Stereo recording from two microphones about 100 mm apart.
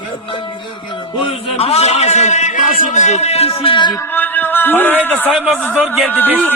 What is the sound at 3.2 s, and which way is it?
Speech, 90° left.